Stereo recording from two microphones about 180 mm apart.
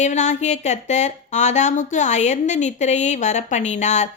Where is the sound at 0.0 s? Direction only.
40° left (ahead or behind).